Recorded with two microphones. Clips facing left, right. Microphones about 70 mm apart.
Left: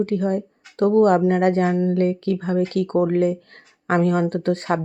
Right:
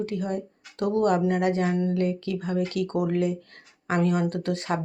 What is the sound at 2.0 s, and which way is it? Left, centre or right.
Speech, left.